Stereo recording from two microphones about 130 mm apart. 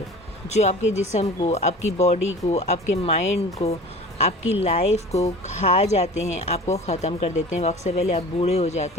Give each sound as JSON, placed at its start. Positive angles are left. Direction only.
{"t": 0.4, "sound": "speech", "side_deg": 60}